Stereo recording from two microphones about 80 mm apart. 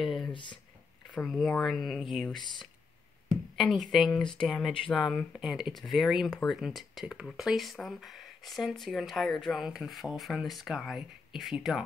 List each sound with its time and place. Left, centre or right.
0.0 s a sound: centre
0.3 s speech: left
1.2 s speech: centre
2.3 s speech: left
3.5 s speech: centre
4.4 s speech: centre